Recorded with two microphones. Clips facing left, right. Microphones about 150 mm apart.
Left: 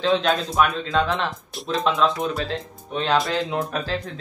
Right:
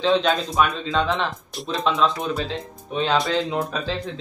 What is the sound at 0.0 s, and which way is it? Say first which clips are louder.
Speech: right 1 dB; centre (ahead or behind).